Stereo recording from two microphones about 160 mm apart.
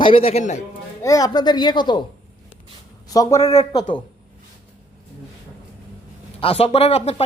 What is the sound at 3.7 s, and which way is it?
Speech, 25° left (ahead or behind).